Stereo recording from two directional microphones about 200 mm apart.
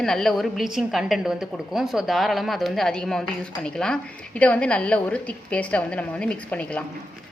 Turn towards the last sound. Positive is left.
turn(degrees=5)  # may be behind; listen again after turning